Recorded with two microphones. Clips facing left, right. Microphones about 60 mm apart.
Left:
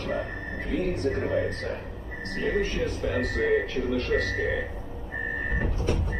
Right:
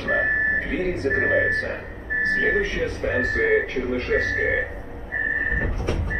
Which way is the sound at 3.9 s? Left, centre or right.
Right.